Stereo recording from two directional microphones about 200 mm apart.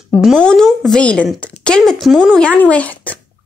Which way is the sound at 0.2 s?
Centre (ahead or behind).